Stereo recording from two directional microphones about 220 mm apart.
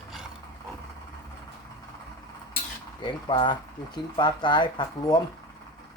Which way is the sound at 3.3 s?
20° left (ahead or behind).